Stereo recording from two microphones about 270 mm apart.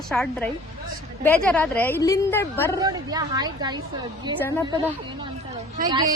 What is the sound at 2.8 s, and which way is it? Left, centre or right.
Speech, centre.